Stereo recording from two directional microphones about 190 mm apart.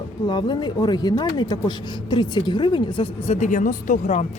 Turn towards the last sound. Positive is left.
turn(degrees=40)  # may be behind; listen again after turning